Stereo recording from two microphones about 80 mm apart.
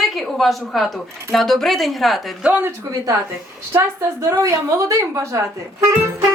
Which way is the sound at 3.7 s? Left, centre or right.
Right.